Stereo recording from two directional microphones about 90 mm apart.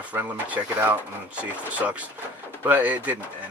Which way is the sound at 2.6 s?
20° right (ahead or behind).